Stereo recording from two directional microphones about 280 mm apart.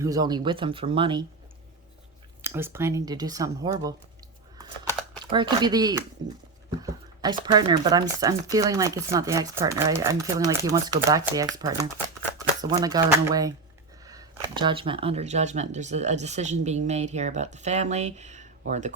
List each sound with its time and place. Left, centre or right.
0.0 s speech: centre
2.4 s speech: centre
5.2 s speech: centre